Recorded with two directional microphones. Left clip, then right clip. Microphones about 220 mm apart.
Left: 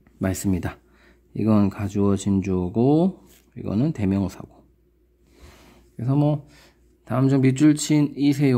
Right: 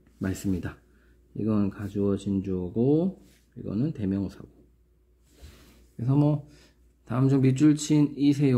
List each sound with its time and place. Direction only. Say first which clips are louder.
0.2 s speech: left 6 dB; 35° left (ahead or behind)
5.9 s speech: left 3 dB; 20° left (ahead or behind)